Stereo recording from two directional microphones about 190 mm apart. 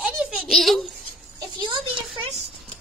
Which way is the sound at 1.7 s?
25° right (ahead or behind).